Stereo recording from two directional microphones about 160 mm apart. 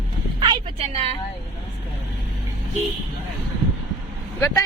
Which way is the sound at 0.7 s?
40° right (ahead or behind).